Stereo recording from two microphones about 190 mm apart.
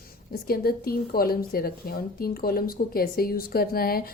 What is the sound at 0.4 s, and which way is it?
A woman's voice, 50° left (ahead or behind).